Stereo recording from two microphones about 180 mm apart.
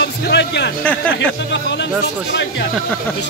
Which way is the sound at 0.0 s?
70° left (ahead or behind).